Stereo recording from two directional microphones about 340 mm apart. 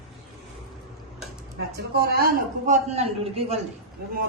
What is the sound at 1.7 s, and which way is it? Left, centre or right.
A man's voice, right.